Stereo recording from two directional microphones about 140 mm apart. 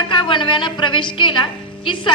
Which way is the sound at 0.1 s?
35° left (ahead or behind).